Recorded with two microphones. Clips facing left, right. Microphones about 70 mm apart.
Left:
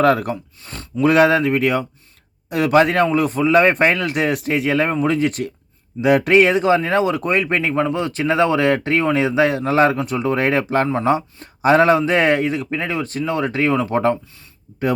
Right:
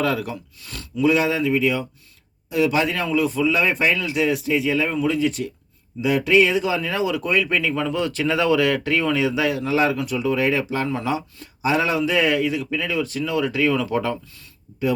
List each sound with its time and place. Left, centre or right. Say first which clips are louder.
0.0 s speech: left 7 dB; left
0.6 s speech: left 3 dB; left
1.0 s a man's voice: left 5 dB; left
7.9 s speech: left 2 dB; left
14.8 s speech: left 2 dB; left